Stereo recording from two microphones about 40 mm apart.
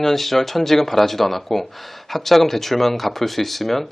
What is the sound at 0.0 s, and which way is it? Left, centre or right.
Speech, centre.